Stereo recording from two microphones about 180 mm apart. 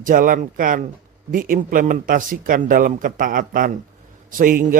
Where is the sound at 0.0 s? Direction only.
50° right (ahead or behind).